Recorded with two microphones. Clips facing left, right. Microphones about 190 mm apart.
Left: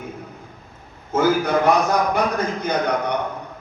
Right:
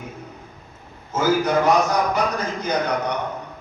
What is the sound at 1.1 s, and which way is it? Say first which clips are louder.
Speech: left 1 dB; 55° left (ahead or behind).